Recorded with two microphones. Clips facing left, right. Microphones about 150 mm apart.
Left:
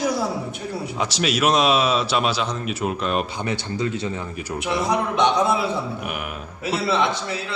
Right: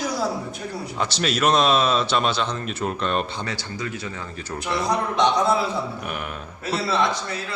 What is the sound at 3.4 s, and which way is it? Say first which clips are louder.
Speech: left 5 dB; 25° left (ahead or behind).